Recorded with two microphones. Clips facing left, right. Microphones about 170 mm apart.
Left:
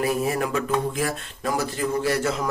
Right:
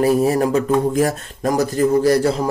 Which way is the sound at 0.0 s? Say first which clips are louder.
Right 8 dB; 35° right (ahead or behind).